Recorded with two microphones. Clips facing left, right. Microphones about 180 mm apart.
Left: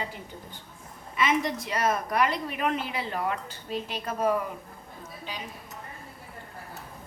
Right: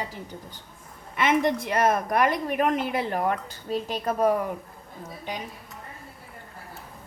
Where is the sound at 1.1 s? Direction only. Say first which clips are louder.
Right 4 dB; 60° right (ahead or behind).